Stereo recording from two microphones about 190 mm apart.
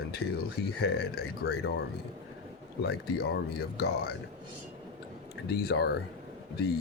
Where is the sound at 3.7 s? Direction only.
55° left (ahead or behind).